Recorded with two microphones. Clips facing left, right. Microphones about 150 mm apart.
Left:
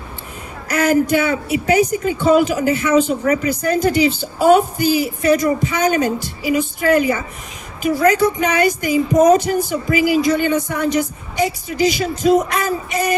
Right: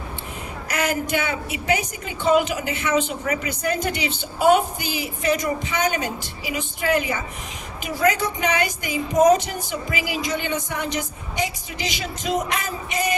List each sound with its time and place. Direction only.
0.7 s a woman's voice: 40° left (ahead or behind)